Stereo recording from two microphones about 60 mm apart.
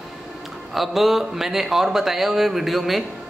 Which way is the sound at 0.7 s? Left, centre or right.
Centre.